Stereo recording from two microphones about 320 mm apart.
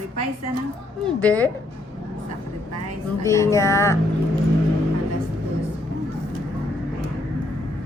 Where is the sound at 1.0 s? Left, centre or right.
Centre.